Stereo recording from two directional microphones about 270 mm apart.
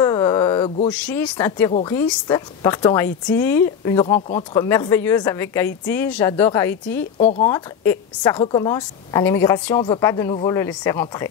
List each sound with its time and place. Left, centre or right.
0.0 s a sound: centre
0.9 s a woman's voice: centre
7.2 s a woman's voice: left